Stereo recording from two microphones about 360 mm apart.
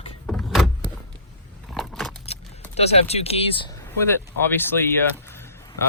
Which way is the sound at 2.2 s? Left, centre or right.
Centre.